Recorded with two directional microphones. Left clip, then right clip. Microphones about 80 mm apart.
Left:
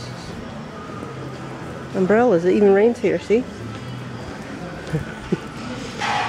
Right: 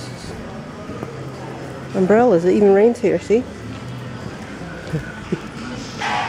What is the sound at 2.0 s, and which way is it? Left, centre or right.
Speech, centre.